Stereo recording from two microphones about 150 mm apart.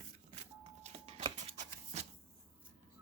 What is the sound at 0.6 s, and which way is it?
Shuffling cards, 40° right (ahead or behind).